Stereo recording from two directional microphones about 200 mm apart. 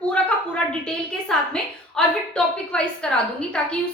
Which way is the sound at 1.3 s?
Centre (ahead or behind).